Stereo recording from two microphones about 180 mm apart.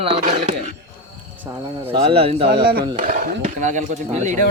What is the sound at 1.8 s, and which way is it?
Speech, 30° right (ahead or behind).